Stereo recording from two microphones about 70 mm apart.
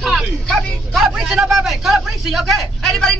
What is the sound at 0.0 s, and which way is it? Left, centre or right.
Vehicle, centre.